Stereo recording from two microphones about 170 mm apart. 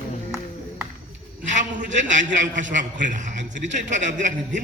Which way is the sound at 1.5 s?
45° right (ahead or behind).